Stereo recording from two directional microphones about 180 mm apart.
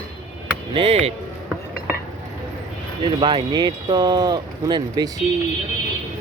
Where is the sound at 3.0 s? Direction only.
25° right (ahead or behind).